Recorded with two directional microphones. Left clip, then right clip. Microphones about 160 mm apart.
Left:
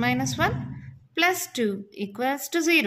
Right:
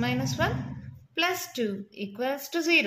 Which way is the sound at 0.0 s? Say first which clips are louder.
Left 4 dB; 45° left (ahead or behind).